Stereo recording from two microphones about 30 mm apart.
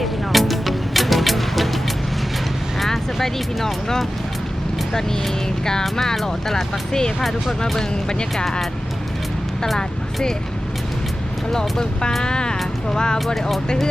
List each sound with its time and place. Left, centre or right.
0.0 s music: centre
2.8 s speech: centre
6.2 s speech: centre
11.5 s speech: centre
13.1 s speech: centre